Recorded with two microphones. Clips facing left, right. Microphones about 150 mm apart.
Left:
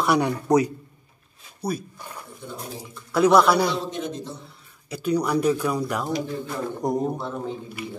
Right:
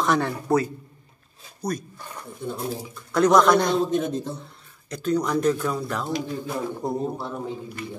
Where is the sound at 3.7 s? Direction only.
50° right (ahead or behind).